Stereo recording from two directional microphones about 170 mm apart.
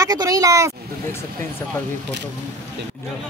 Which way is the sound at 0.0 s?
20° right (ahead or behind).